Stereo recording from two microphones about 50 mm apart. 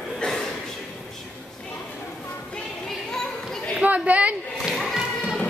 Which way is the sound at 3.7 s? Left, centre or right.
Right.